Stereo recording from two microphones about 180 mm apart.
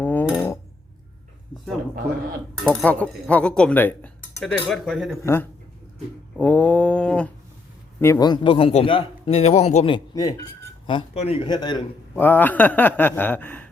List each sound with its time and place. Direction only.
0.0 s dishes: 10° left (ahead or behind)
2.8 s speech: 10° left (ahead or behind)
5.2 s speech: 15° left (ahead or behind)
8.0 s a man's voice: 20° left (ahead or behind)
12.1 s speech: 10° left (ahead or behind)